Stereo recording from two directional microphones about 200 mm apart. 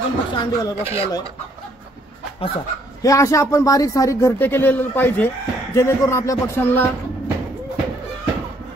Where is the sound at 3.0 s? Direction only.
15° left (ahead or behind).